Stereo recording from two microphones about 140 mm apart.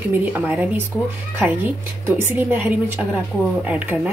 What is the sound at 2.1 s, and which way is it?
Speech, 15° right (ahead or behind).